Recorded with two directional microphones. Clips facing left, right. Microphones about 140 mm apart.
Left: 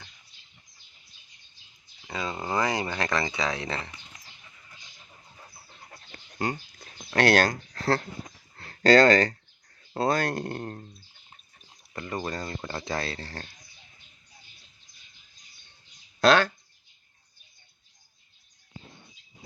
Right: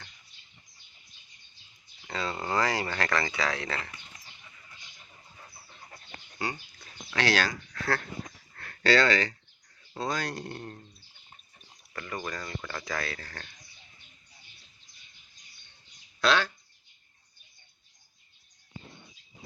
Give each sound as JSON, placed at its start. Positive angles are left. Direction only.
{"t": 2.0, "sound": "speech", "side_deg": 15}
{"t": 6.4, "sound": "speech", "side_deg": 50}
{"t": 8.5, "sound": "a sound", "side_deg": 25}
{"t": 8.8, "sound": "speech", "side_deg": 45}
{"t": 9.9, "sound": "speech", "side_deg": 55}
{"t": 11.9, "sound": "speech", "side_deg": 25}
{"t": 16.2, "sound": "a sound", "side_deg": 45}